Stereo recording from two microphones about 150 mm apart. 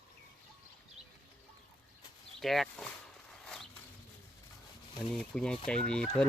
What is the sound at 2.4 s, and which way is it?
Speech, centre (ahead or behind).